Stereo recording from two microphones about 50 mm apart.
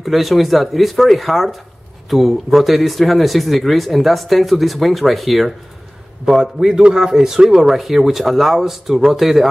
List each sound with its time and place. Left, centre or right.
0.0 s speech: centre
6.4 s speech: centre